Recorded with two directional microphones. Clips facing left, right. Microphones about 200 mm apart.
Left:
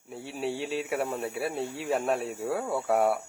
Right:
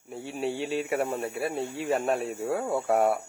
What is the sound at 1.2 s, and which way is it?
Speech, centre (ahead or behind).